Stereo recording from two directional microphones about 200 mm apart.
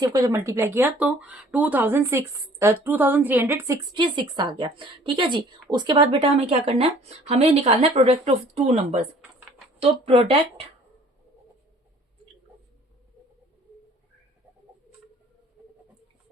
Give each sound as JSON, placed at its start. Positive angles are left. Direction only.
{"t": 0.0, "sound": "speech", "side_deg": -20}